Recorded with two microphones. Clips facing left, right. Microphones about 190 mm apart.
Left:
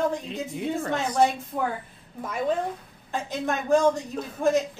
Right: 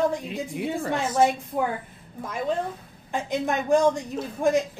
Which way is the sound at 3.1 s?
15° right (ahead or behind).